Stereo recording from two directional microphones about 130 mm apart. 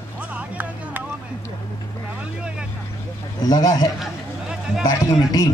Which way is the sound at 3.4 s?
25° left (ahead or behind).